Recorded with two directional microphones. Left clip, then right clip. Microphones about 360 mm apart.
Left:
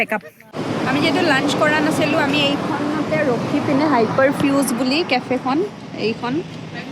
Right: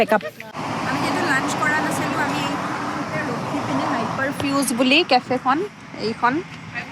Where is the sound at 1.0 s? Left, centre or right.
Centre.